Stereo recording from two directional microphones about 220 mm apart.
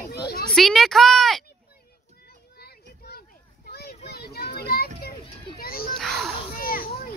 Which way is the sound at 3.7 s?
45° left (ahead or behind).